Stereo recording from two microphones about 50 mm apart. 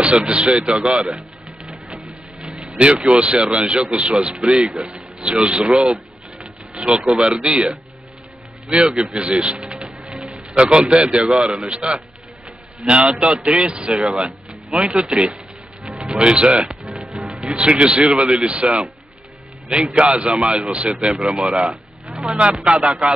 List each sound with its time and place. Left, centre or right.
0.0 s a man's voice: right
3.1 s a man's voice: right
5.2 s a man's voice: right
7.0 s a man's voice: centre
11.4 s speech: centre
11.7 s a man's voice: right
14.0 s speech: centre
15.8 s music: centre
17.6 s a man's voice: right
20.0 s a man's voice: right